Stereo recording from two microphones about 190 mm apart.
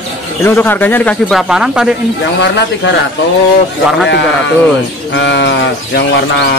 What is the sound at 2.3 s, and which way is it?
Speech, 70° left (ahead or behind).